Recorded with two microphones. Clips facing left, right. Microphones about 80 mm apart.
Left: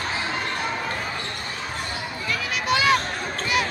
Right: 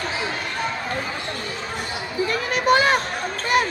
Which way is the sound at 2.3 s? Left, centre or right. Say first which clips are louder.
Right 5 dB; right.